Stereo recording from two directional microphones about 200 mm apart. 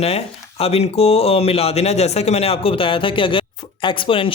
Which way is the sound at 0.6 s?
30° left (ahead or behind).